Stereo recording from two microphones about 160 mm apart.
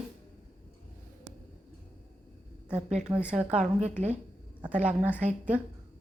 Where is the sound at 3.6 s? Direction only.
45° right (ahead or behind).